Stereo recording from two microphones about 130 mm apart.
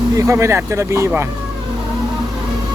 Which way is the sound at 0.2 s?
25° right (ahead or behind).